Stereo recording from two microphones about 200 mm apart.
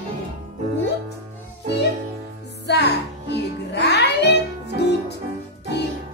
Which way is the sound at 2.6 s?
60° left (ahead or behind).